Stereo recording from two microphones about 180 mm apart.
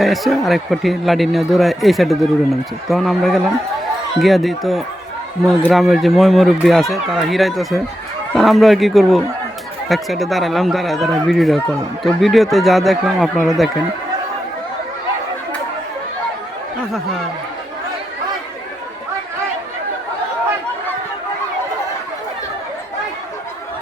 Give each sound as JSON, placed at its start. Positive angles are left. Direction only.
{"t": 0.0, "sound": "speech", "side_deg": 0}